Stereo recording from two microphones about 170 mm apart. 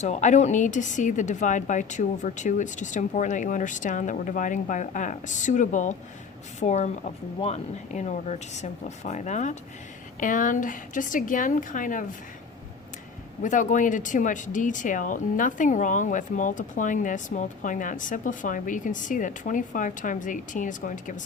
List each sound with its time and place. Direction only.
0.0 s speech: 45° left (ahead or behind)
13.4 s speech: 45° left (ahead or behind)